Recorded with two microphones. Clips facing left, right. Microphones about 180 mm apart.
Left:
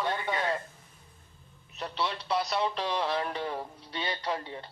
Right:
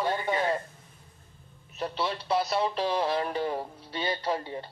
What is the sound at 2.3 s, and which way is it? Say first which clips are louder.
A man's voice: right 3 dB; 25° right (ahead or behind).